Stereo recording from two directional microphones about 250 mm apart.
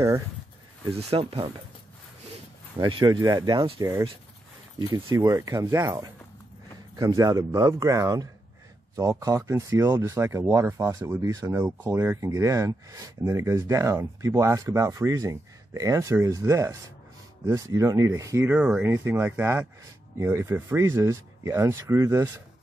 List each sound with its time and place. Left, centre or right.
0.9 s speech: right
2.8 s speech: centre